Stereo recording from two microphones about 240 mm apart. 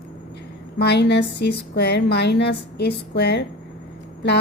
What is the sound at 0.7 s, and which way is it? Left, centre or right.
A woman's voice, left.